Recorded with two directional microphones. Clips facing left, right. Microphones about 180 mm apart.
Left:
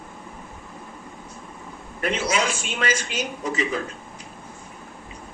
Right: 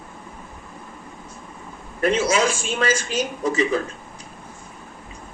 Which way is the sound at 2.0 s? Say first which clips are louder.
Right 5 dB; 45° right (ahead or behind).